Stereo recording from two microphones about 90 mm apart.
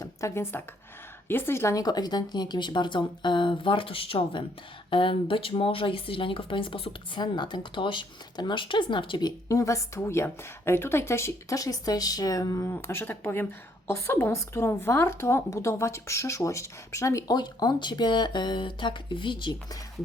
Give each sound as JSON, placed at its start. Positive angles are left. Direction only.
{"t": 0.0, "sound": "a woman's voice", "side_deg": 35}
{"t": 1.8, "sound": "speech", "side_deg": 50}
{"t": 9.2, "sound": "a woman's voice", "side_deg": 40}
{"t": 12.7, "sound": "a woman's voice", "side_deg": 25}
{"t": 17.2, "sound": "speech", "side_deg": 50}